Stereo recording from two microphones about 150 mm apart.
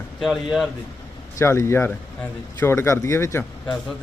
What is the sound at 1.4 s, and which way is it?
A man's voice, 20° left (ahead or behind).